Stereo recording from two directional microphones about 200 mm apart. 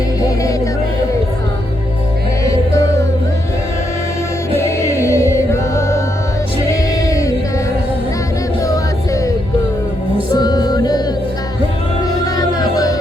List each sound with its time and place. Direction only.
0.2 s music: 15° left (ahead or behind)
2.4 s music: 15° left (ahead or behind)
4.5 s music: 15° left (ahead or behind)
10.3 s music: 20° left (ahead or behind)
12.2 s music: 20° left (ahead or behind)